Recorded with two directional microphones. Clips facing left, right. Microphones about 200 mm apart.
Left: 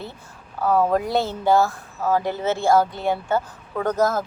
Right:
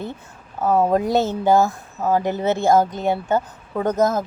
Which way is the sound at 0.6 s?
20° right (ahead or behind).